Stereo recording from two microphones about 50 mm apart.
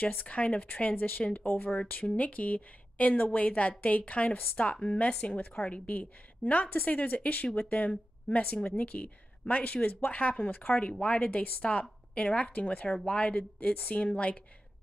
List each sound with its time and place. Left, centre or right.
0.0 s a woman's voice: left
1.4 s speech: left
1.8 s a woman's voice: left